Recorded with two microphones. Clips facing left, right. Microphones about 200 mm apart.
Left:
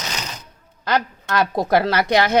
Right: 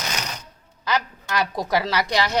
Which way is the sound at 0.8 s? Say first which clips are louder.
Left 4 dB; 55° left (ahead or behind).